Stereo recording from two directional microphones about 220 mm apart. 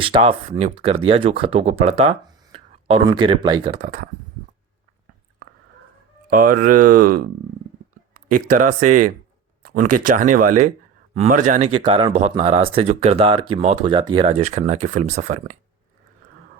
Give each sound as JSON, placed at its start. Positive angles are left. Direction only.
{"t": 0.0, "sound": "speech", "side_deg": -25}
{"t": 6.3, "sound": "speech", "side_deg": -40}